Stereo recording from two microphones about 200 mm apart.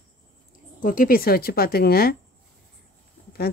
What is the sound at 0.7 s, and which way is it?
A woman's voice, 45° left (ahead or behind).